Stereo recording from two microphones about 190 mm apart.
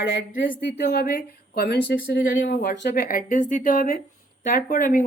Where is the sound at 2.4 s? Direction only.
65° left (ahead or behind); by 5.0 s 45° left (ahead or behind).